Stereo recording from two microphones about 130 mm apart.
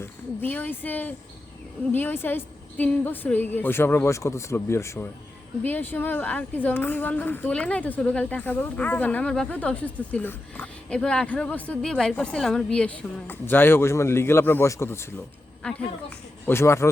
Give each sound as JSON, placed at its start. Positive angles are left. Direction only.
{"t": 0.0, "sound": "a woman's voice", "side_deg": 15}
{"t": 15.6, "sound": "a woman's voice", "side_deg": 10}
{"t": 16.5, "sound": "a man's voice", "side_deg": 20}